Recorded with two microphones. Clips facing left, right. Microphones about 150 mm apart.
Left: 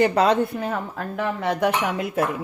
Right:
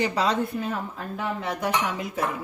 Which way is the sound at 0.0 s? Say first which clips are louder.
Left 6 dB; 55° left (ahead or behind).